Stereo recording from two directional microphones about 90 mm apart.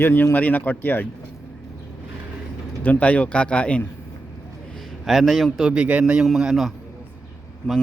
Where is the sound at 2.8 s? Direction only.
15° left (ahead or behind).